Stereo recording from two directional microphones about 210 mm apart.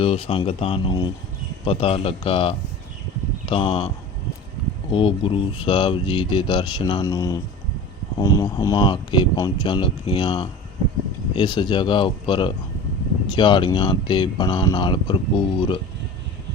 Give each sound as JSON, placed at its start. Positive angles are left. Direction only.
{"t": 0.0, "sound": "speech", "side_deg": 25}
{"t": 4.9, "sound": "speech", "side_deg": 25}